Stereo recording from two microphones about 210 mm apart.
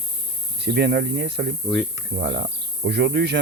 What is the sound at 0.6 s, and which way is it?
Speech, 55° right (ahead or behind).